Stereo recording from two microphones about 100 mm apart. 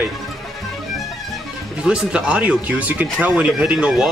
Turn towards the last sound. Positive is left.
turn(degrees=-10)  # may be behind; listen again after turning